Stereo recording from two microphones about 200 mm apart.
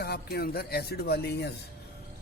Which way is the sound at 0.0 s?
50° left (ahead or behind).